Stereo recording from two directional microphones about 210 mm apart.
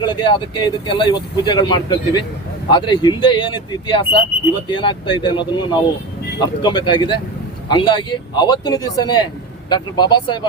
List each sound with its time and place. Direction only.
0.0 s a man's voice: 20° left (ahead or behind)